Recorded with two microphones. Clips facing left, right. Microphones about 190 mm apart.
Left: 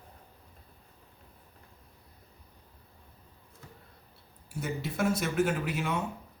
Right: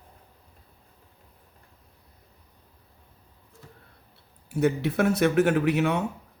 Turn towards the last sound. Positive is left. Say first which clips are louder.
# right 9 dB
turn(degrees=-65)  # may be behind; listen again after turning